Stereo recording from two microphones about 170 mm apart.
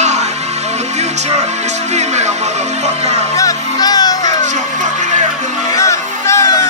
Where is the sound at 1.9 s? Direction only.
40° right (ahead or behind).